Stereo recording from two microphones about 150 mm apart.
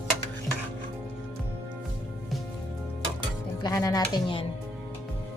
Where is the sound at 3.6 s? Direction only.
25° left (ahead or behind).